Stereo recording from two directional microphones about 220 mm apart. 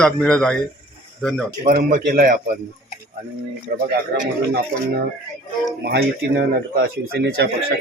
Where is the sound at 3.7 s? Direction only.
45° right (ahead or behind).